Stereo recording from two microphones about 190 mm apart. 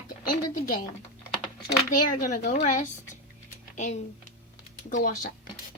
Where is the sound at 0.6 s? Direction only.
50° left (ahead or behind).